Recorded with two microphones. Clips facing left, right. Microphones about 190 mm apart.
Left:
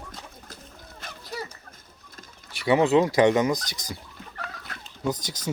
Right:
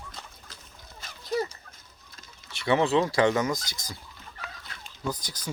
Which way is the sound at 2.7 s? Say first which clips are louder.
Left 4 dB; 15° left (ahead or behind).